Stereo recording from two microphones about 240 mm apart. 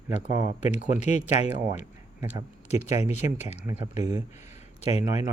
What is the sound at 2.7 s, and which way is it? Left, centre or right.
Speech, left.